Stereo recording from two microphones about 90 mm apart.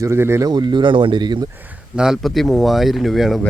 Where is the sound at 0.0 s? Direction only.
30° right (ahead or behind).